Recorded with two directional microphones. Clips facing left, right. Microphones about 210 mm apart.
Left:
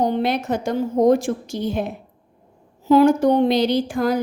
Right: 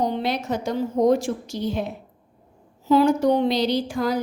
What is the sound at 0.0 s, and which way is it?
A woman's voice, 50° left (ahead or behind).